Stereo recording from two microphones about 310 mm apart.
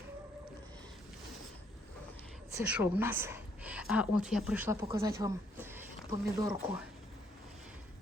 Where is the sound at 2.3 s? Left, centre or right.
Centre.